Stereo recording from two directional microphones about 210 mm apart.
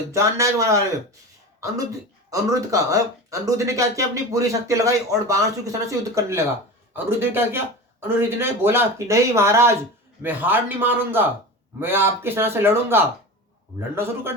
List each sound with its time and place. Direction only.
0.1 s speech: 15° right (ahead or behind)
2.3 s speech: 15° right (ahead or behind)